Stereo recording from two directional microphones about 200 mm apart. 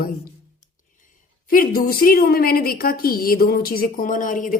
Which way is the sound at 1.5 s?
45° left (ahead or behind).